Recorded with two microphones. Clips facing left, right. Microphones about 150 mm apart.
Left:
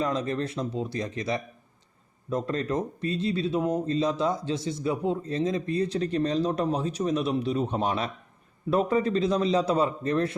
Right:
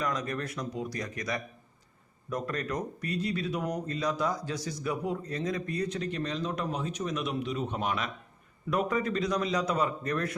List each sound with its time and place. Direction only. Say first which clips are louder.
0.0 s speech: left 5 dB; 25° left (ahead or behind)